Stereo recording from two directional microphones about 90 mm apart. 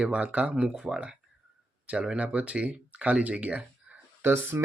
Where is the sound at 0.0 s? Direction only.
15° right (ahead or behind).